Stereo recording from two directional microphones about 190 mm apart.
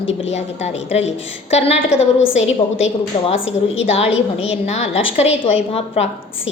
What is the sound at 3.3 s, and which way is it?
Speech, 90° left.